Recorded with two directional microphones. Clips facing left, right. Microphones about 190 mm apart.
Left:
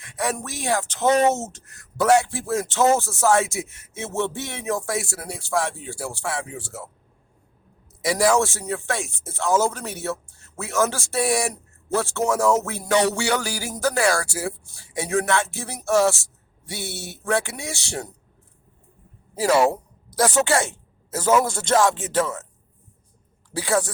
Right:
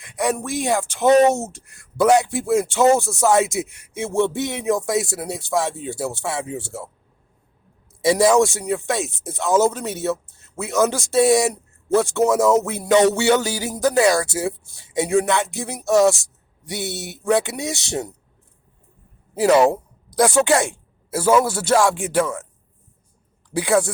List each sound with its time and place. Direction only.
0.0 s speech: 15° right (ahead or behind)
8.0 s a man's voice: 25° right (ahead or behind)
19.3 s speech: 20° right (ahead or behind)
23.6 s speech: 15° right (ahead or behind)